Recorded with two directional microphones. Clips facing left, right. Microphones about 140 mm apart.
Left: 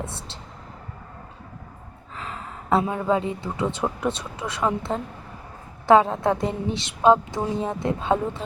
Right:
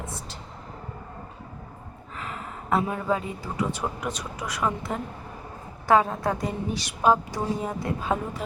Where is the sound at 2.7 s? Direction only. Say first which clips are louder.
Left 4 dB; 25° left (ahead or behind).